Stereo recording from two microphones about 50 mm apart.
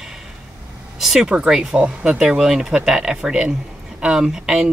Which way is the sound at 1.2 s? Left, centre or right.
Centre.